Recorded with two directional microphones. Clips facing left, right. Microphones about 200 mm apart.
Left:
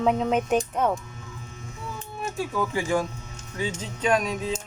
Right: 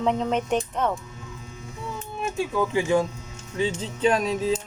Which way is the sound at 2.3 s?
20° right (ahead or behind).